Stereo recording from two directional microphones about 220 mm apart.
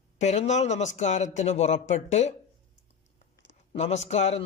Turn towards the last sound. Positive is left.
turn(degrees=30)  # may be behind; listen again after turning